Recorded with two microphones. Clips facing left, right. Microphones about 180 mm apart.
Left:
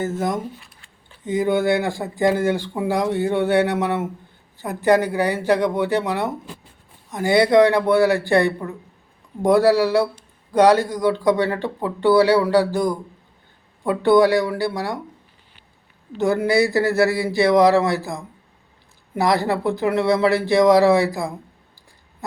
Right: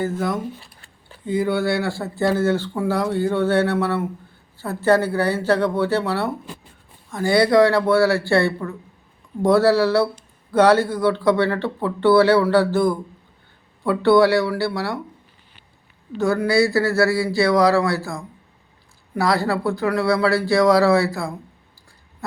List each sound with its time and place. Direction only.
0.6 s a sound: 35° right (ahead or behind)
1.2 s speech: 20° left (ahead or behind)
16.1 s speech: 20° left (ahead or behind)